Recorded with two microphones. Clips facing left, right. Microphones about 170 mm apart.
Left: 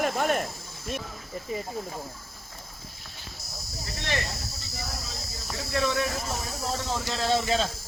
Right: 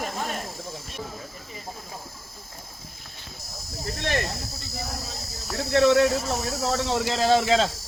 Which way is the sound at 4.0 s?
55° right (ahead or behind).